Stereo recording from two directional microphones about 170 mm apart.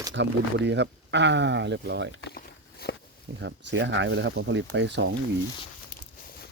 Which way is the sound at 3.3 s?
90° right.